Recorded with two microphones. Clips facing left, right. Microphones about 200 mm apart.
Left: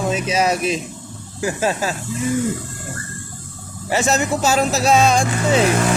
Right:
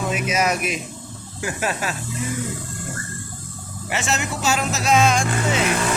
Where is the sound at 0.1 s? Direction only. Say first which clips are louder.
Left 2 dB; 30° left (ahead or behind).